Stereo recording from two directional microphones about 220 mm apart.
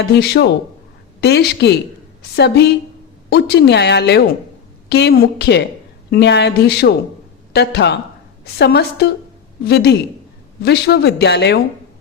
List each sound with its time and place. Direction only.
0.2 s speech: 50° left (ahead or behind)